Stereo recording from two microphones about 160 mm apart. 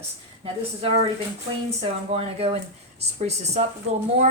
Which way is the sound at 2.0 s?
40° right (ahead or behind).